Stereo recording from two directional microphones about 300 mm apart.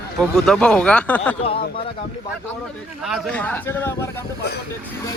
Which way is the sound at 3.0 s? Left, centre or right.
Centre.